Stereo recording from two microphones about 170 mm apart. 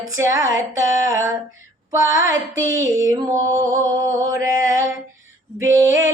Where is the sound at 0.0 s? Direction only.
20° right (ahead or behind).